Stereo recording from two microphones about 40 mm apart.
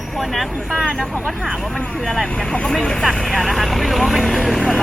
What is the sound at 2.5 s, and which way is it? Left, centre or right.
Speech, centre.